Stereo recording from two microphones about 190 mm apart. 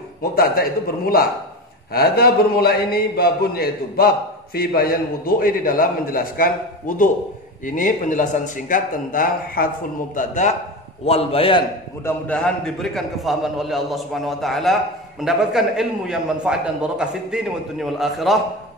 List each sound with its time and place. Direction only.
0.2 s a man's voice: 50° left (ahead or behind); by 11.6 s 30° left (ahead or behind)
12.0 s a man's voice: 10° left (ahead or behind)